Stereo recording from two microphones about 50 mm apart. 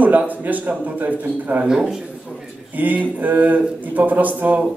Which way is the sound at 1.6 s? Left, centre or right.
Centre.